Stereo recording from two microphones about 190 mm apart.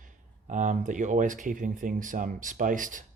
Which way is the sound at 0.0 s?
40° right (ahead or behind).